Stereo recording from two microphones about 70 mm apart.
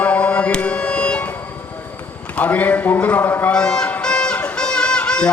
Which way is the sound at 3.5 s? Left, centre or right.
Centre.